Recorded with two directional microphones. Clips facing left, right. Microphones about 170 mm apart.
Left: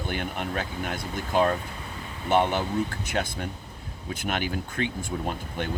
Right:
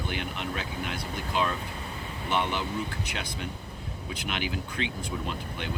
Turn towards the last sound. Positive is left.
turn(degrees=50)  # may be behind; listen again after turning